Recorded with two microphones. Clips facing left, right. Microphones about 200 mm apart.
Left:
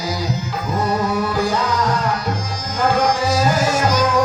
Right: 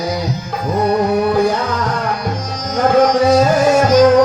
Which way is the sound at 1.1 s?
60° right (ahead or behind).